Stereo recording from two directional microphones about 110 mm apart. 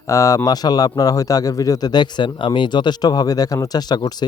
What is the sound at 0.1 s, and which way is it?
A man's voice, 30° left (ahead or behind).